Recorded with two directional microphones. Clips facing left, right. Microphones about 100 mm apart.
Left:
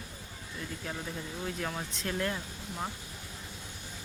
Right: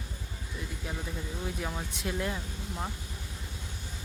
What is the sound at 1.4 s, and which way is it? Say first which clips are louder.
Speech: left 1 dB; 10° right (ahead or behind).